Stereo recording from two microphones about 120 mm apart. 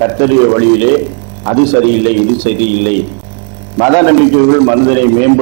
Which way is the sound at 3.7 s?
20° right (ahead or behind).